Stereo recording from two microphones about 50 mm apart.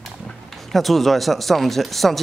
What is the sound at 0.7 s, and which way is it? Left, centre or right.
Speech, centre.